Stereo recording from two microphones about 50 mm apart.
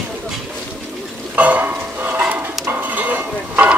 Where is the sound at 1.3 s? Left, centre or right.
Right.